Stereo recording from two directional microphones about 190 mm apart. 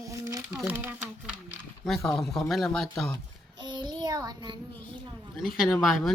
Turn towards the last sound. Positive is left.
turn(degrees=0)  # may be behind; listen again after turning